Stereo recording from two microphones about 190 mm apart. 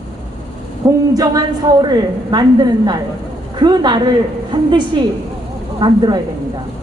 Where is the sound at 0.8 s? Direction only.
15° right (ahead or behind).